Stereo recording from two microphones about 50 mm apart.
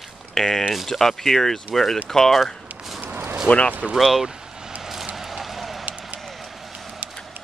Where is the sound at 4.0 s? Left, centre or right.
Centre.